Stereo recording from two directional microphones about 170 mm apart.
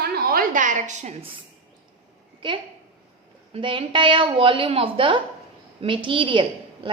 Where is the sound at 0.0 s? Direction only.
60° right (ahead or behind); by 1.3 s 45° right (ahead or behind).